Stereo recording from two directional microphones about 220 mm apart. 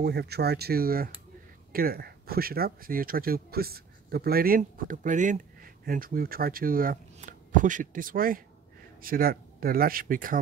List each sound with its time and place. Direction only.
0.0 s speech: 45° right (ahead or behind)